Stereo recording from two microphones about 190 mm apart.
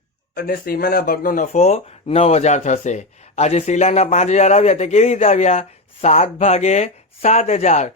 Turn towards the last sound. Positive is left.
turn(degrees=35)  # may be behind; listen again after turning